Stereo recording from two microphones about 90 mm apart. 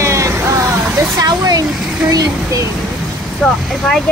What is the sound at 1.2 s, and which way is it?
Speech, 40° right (ahead or behind).